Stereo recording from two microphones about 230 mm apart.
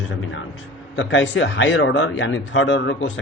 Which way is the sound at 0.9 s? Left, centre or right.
Left.